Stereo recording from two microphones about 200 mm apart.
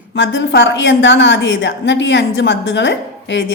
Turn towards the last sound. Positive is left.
turn(degrees=65)  # may be behind; listen again after turning